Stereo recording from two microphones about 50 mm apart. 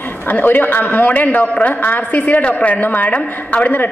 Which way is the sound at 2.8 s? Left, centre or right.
Left.